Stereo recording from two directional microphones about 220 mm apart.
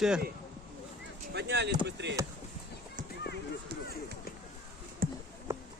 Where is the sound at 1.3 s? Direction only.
50° right (ahead or behind).